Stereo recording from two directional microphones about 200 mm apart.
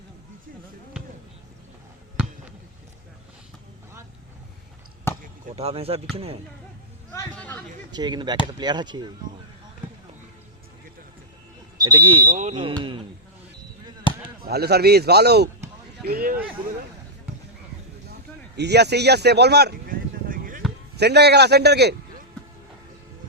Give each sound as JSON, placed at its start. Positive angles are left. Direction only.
{"t": 5.1, "sound": "basketball bounce", "side_deg": 10}
{"t": 5.5, "sound": "speech", "side_deg": -30}
{"t": 7.1, "sound": "a sound", "side_deg": 10}
{"t": 7.9, "sound": "speech", "side_deg": -20}
{"t": 11.8, "sound": "speech", "side_deg": -20}
{"t": 12.3, "sound": "speech", "side_deg": -35}
{"t": 12.7, "sound": "speech", "side_deg": -25}
{"t": 14.1, "sound": "basketball bounce", "side_deg": 25}
{"t": 14.4, "sound": "a man's voice", "side_deg": -50}
{"t": 18.5, "sound": "speech", "side_deg": -55}
{"t": 20.9, "sound": "a man's voice", "side_deg": -55}